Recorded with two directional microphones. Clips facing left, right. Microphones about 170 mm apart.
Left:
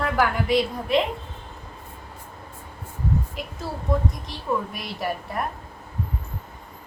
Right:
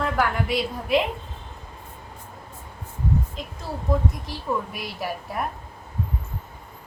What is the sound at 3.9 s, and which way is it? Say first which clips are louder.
A woman's voice: right 1 dB; centre (ahead or behind).